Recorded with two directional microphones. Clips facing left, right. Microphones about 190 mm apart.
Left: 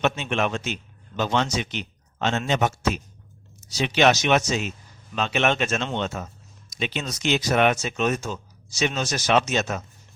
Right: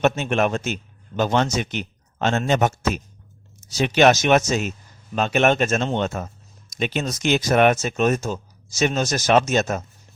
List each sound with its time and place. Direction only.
0.0 s speech: 45° right (ahead or behind)